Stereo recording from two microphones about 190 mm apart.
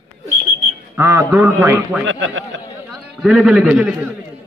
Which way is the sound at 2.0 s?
80° right.